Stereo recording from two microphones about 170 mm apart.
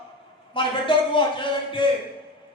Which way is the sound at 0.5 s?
30° left (ahead or behind).